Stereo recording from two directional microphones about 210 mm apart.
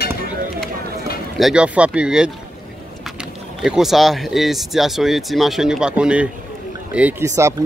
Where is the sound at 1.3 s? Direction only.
Centre (ahead or behind).